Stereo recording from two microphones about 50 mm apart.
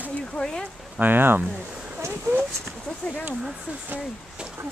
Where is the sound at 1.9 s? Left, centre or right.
Right.